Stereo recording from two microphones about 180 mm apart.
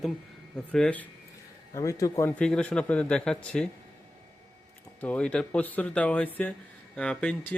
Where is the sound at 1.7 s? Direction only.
20° left (ahead or behind).